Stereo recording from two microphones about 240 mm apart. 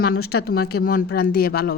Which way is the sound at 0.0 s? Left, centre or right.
Left.